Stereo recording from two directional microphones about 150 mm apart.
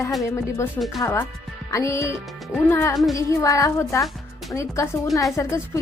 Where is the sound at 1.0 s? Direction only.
15° left (ahead or behind).